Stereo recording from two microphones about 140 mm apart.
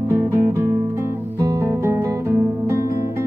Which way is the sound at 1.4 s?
20° right (ahead or behind).